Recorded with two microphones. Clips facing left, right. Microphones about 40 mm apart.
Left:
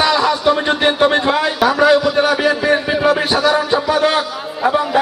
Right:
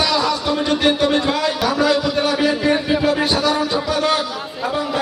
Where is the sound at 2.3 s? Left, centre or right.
Centre.